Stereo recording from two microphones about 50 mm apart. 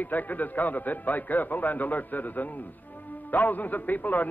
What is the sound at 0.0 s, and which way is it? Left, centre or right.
A man's voice, left.